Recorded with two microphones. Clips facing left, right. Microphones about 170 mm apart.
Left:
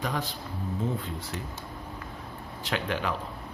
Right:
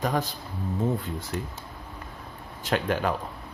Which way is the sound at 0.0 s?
45° right (ahead or behind).